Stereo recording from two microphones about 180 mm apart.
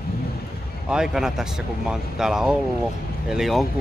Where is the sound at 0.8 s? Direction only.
5° right (ahead or behind).